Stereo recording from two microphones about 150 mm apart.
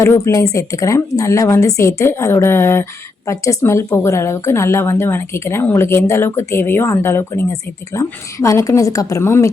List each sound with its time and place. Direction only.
0.0 s a woman's voice: 20° left (ahead or behind)